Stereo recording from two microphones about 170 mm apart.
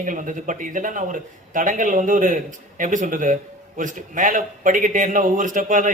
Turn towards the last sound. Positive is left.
turn(degrees=-50)  # may be behind; listen again after turning